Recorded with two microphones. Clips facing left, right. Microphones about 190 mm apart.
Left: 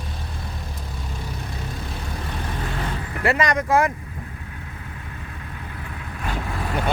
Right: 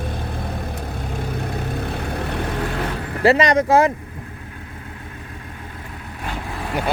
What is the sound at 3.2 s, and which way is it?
Speech, 30° right (ahead or behind).